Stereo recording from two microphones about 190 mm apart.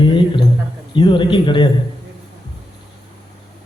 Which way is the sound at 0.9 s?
25° left (ahead or behind).